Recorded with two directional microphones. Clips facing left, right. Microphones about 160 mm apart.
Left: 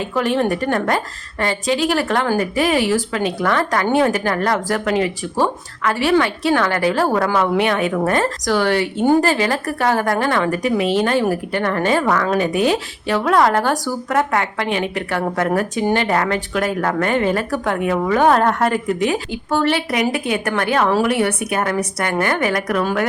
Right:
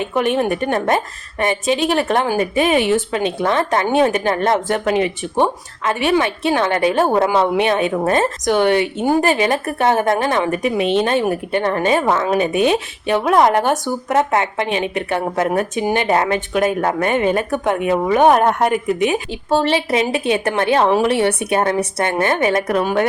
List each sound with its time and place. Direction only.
0.0 s a woman's voice: 20° right (ahead or behind)